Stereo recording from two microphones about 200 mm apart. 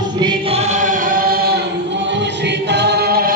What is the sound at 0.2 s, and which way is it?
Choir, 25° right (ahead or behind).